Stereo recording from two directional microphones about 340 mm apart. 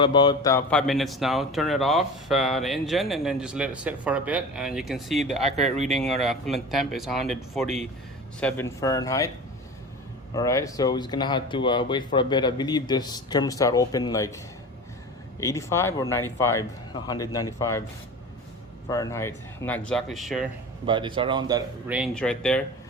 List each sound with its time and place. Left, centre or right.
0.0 s speech: centre
5.2 s speech: centre
5.9 s speech: centre
10.3 s speech: centre
18.9 s speech: centre
20.8 s speech: centre